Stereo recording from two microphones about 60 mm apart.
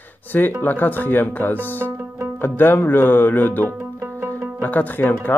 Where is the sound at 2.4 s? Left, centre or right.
Left.